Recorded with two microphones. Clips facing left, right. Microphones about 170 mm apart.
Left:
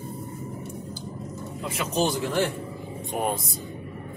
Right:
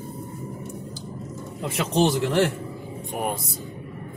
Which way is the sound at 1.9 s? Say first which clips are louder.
Right 4 dB; 70° right (ahead or behind).